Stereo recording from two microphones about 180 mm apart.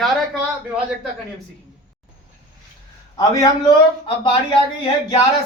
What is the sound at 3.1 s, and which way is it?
Speech, 20° left (ahead or behind).